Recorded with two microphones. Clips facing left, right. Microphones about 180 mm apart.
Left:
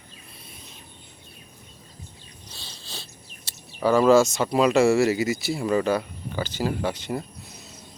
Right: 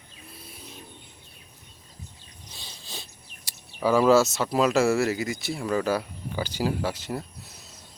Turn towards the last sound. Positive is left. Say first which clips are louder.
# left 3 dB
turn(degrees=0)  # may be behind; listen again after turning